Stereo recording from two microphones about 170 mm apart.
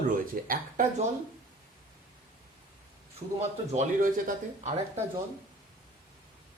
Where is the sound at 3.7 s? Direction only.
45° right (ahead or behind).